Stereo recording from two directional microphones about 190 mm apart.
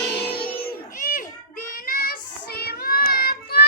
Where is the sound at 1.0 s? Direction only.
45° left (ahead or behind).